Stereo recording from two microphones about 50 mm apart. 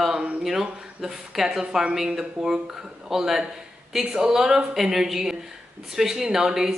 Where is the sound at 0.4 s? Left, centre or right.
Centre.